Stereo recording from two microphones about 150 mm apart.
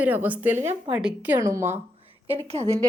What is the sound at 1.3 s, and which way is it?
Speech, 20° right (ahead or behind).